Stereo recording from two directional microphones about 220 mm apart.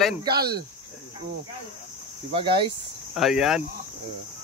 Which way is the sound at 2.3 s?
25° right (ahead or behind).